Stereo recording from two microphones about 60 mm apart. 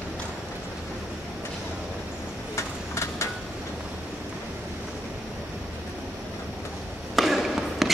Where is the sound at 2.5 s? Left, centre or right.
Left.